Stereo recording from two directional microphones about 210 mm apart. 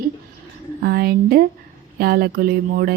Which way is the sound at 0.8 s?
45° right (ahead or behind).